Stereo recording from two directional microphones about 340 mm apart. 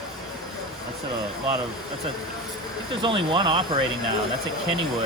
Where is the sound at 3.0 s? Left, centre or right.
Centre.